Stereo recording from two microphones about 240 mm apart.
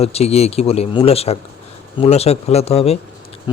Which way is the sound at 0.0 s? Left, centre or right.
Left.